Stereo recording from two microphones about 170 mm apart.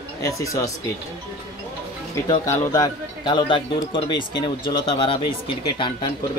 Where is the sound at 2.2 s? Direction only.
20° left (ahead or behind).